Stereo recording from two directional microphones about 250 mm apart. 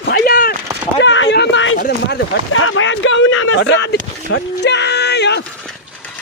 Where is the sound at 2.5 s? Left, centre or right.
Left.